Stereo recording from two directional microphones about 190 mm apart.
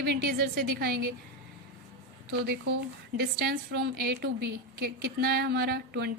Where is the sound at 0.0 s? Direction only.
55° right (ahead or behind).